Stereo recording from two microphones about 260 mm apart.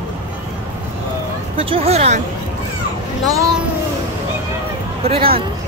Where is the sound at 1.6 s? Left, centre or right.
Right.